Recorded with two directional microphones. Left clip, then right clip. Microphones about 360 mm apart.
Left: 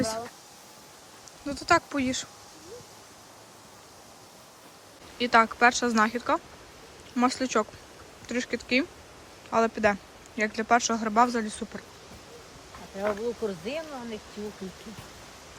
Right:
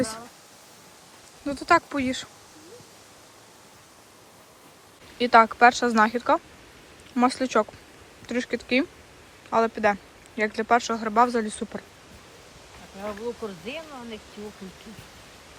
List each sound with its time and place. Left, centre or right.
1.5 s speech: centre
5.1 s speech: centre
13.0 s speech: left